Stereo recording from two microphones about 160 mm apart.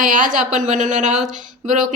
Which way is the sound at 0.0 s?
55° right (ahead or behind).